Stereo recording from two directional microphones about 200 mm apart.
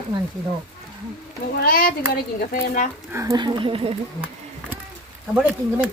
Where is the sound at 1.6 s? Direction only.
45° left (ahead or behind).